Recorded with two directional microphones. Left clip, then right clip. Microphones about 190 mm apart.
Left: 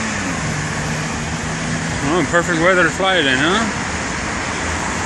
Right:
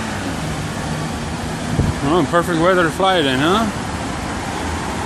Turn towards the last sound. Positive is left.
turn(degrees=-20)  # may be behind; listen again after turning